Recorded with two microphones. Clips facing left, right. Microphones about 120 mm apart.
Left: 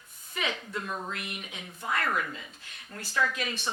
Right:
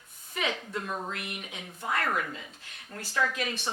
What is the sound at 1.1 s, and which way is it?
A woman's voice, 55° right (ahead or behind).